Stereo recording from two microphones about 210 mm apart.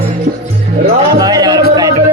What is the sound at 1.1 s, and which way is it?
Speech, 20° right (ahead or behind).